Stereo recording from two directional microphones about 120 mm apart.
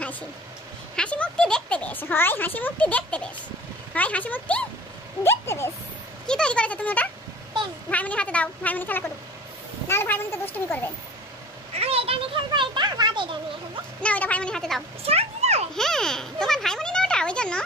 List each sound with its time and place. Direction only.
0.9 s a child's voice: 10° left (ahead or behind)
6.2 s a child's voice: 5° left (ahead or behind)
11.7 s a sound: 55° right (ahead or behind)
14.0 s speech: 10° left (ahead or behind)
15.0 s children playing: 60° right (ahead or behind)
15.7 s a sound: 5° left (ahead or behind)